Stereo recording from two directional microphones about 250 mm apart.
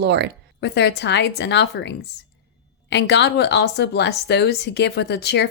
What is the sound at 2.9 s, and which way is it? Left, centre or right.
Speech, left.